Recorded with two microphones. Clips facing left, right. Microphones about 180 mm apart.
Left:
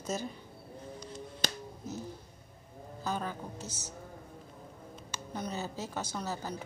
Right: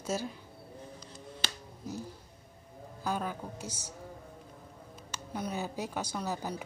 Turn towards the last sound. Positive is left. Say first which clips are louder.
# right 2 dB
turn(degrees=-15)  # may be behind; listen again after turning